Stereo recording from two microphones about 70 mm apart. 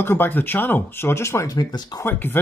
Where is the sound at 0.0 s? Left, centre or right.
Left.